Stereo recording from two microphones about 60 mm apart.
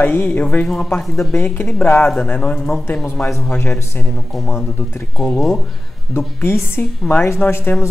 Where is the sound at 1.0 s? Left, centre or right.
Centre.